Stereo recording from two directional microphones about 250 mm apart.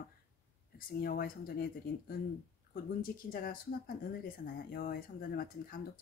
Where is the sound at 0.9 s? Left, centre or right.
Left.